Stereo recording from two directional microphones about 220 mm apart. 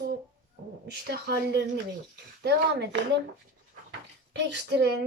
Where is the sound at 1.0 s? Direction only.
50° right (ahead or behind).